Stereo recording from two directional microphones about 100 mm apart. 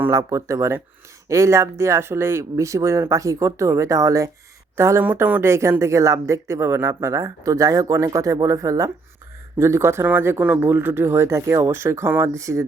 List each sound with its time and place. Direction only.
0.1 s speech: 30° right (ahead or behind)
5.0 s speech: 15° right (ahead or behind)